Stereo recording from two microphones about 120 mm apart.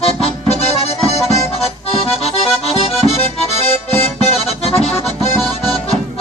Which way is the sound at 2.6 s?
60° left (ahead or behind).